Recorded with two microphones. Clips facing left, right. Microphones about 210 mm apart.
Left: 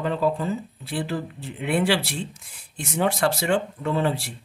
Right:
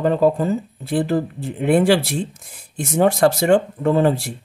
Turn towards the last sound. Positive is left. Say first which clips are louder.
# right 7 dB
turn(degrees=-45)  # may be behind; listen again after turning